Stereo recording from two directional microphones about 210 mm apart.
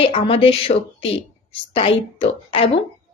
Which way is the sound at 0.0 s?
25° left (ahead or behind).